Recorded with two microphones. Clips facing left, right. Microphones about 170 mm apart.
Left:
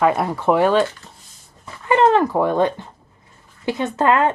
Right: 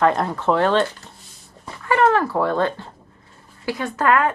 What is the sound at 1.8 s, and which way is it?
A woman's voice, 20° left (ahead or behind).